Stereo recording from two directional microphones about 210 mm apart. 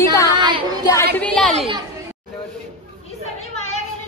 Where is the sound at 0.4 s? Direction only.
20° right (ahead or behind).